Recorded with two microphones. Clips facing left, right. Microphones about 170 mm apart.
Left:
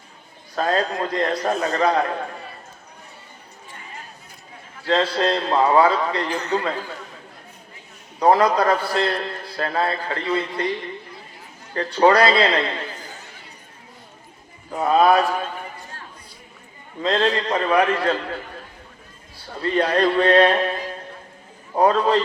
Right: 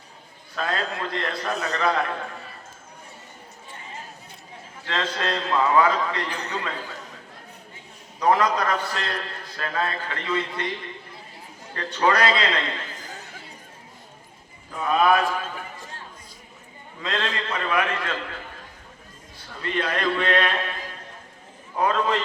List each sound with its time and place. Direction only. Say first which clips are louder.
0.5 s a man's voice: left 6 dB; 40° left (ahead or behind)
4.9 s a man's voice: left 7 dB; 35° left (ahead or behind)
8.2 s a man's voice: left 5 dB; 35° left (ahead or behind)
11.9 s a man's voice: left 6 dB; 35° left (ahead or behind)
14.7 s a man's voice: left 4 dB; 40° left (ahead or behind)
17.0 s a man's voice: left 8 dB; 35° left (ahead or behind)
19.5 s a man's voice: left 7 dB; 35° left (ahead or behind)
21.8 s a man's voice: left 6 dB; 35° left (ahead or behind)